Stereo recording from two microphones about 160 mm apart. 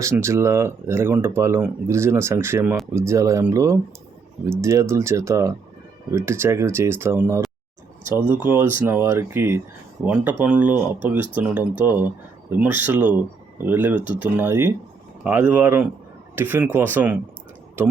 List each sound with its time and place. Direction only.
0.0 s speech: 15° right (ahead or behind)